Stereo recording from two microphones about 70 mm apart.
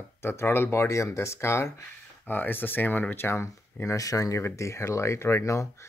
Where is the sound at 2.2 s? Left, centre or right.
Left.